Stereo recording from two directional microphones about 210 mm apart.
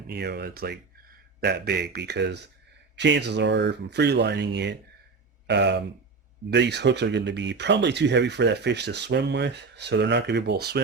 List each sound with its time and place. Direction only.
0.1 s speech: 50° right (ahead or behind)